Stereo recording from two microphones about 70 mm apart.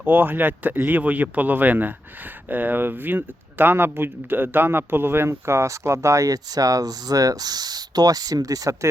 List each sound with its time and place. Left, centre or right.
0.0 s speech: right